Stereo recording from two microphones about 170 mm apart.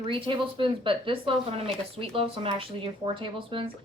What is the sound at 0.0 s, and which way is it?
A woman's voice, 30° right (ahead or behind).